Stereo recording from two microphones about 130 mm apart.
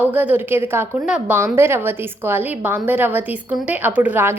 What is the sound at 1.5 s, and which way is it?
A woman's voice, 20° right (ahead or behind).